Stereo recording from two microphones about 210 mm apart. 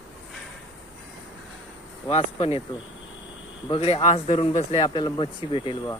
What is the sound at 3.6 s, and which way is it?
Speech, 25° left (ahead or behind).